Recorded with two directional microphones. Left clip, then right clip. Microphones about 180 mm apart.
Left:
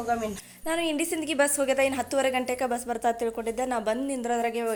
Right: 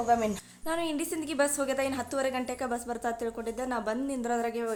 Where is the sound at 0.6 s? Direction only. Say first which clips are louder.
Left 4 dB; 10° left (ahead or behind).